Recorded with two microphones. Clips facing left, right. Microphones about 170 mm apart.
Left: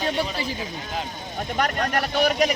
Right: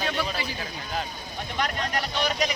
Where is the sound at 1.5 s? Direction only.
50° left (ahead or behind).